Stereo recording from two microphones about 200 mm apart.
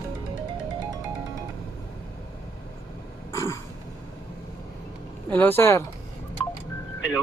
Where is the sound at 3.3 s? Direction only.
15° left (ahead or behind).